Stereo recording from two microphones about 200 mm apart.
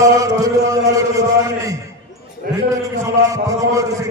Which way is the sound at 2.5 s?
45° right (ahead or behind).